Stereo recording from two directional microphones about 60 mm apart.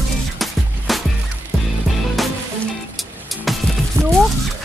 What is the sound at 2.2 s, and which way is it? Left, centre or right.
Music, centre.